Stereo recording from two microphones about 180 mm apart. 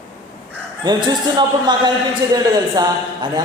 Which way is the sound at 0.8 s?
25° right (ahead or behind).